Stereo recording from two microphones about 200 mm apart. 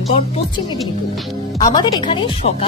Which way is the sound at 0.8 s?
Centre (ahead or behind).